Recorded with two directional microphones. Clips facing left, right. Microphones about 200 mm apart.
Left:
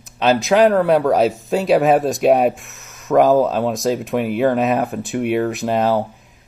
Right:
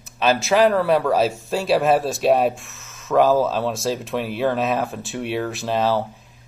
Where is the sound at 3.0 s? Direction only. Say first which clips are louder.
Left 3 dB; 15° left (ahead or behind).